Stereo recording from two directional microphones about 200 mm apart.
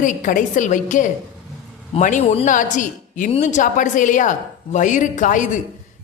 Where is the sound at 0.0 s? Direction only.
40° left (ahead or behind).